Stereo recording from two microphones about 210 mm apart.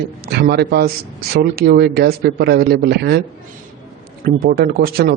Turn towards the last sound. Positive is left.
turn(degrees=-45)  # may be behind; listen again after turning